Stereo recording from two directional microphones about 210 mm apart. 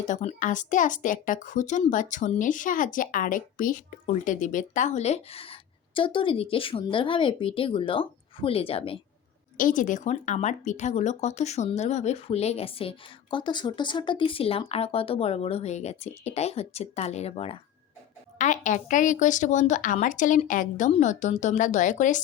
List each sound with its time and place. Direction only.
0.1 s a woman's voice: 35° left (ahead or behind)
9.6 s a woman's voice: 40° left (ahead or behind)